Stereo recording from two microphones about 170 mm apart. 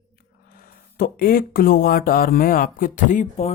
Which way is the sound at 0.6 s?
60° left (ahead or behind).